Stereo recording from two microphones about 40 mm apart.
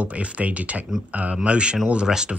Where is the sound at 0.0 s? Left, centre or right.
Right.